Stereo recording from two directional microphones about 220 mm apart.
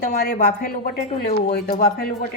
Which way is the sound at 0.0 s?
40° left (ahead or behind).